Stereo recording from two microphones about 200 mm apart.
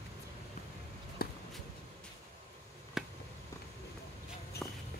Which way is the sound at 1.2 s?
50° left (ahead or behind).